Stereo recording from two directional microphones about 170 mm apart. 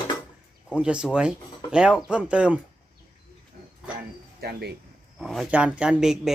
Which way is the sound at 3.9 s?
65° right (ahead or behind).